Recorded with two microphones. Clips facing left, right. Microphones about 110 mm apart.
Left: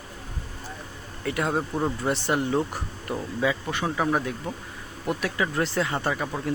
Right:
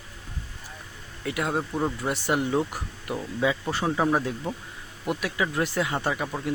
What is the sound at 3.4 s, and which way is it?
Speech, 20° right (ahead or behind).